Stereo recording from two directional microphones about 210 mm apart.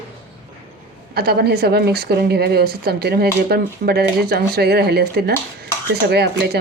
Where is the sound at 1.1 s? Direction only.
50° right (ahead or behind).